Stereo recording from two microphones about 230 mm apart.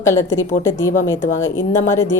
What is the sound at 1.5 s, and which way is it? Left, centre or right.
Speech, left.